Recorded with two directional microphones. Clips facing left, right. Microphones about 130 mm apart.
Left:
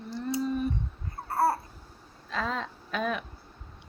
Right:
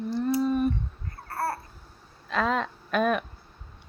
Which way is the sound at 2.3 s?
70° right (ahead or behind).